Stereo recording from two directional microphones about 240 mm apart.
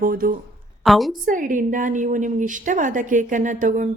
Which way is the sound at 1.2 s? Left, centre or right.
Right.